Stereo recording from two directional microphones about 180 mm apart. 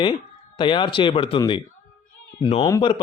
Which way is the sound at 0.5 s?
25° left (ahead or behind).